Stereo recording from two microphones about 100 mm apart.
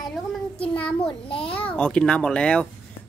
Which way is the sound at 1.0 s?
60° left (ahead or behind).